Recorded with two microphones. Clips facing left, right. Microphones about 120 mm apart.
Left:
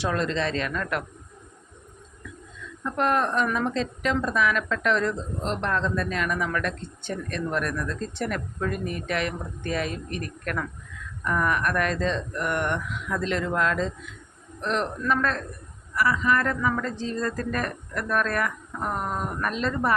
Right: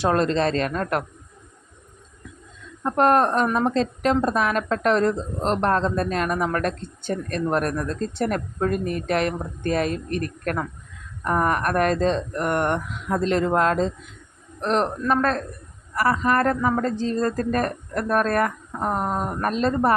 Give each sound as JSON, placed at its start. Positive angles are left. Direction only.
{"t": 0.0, "sound": "a woman's voice", "side_deg": -40}
{"t": 2.8, "sound": "a woman's voice", "side_deg": -45}